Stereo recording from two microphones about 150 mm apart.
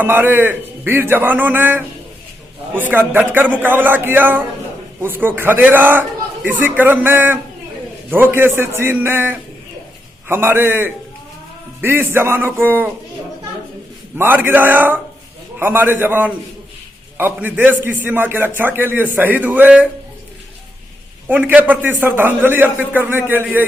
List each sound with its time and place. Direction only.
0.0 s a man's voice: 15° right (ahead or behind)
14.2 s a man's voice: 15° right (ahead or behind)
21.2 s a man's voice: 10° right (ahead or behind)